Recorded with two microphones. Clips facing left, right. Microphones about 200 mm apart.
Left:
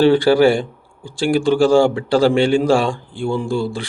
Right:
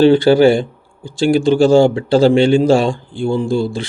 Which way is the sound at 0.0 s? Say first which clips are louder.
Right 3 dB; 25° right (ahead or behind).